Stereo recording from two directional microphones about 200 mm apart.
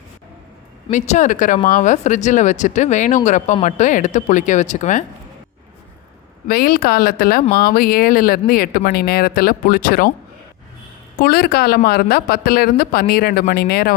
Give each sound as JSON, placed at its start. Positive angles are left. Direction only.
{"t": 0.9, "sound": "speech", "side_deg": 35}
{"t": 6.5, "sound": "speech", "side_deg": 50}
{"t": 11.2, "sound": "speech", "side_deg": 50}